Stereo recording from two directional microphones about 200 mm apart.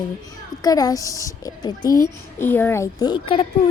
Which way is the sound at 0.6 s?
20° left (ahead or behind).